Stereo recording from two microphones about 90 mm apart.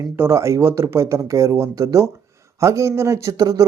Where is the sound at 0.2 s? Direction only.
30° right (ahead or behind).